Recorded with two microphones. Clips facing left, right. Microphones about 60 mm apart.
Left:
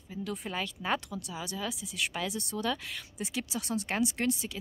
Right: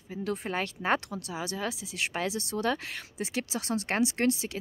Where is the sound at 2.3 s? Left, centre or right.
Right.